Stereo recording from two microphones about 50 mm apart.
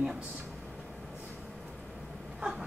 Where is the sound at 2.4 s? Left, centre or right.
Centre.